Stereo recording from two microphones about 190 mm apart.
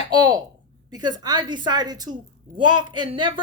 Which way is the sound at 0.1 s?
20° right (ahead or behind).